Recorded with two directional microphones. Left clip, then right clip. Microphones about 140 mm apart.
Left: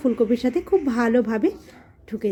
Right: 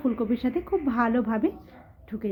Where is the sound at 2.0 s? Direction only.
25° left (ahead or behind).